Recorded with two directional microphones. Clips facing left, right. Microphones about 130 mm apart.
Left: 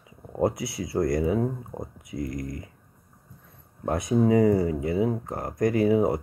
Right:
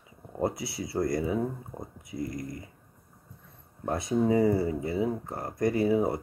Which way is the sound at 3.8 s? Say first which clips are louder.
Left 4 dB; 20° left (ahead or behind).